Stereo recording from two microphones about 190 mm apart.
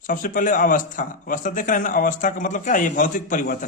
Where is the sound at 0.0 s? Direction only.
45° left (ahead or behind).